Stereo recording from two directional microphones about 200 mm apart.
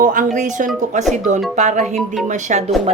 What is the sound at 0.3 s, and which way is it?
Speech, 40° right (ahead or behind).